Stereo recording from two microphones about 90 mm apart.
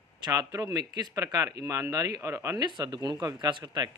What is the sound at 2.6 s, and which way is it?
Speech, 50° right (ahead or behind).